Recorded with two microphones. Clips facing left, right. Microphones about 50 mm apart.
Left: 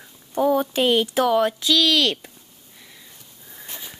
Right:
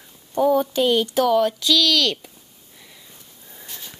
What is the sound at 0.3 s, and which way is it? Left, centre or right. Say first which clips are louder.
Speech: right 1 dB; centre.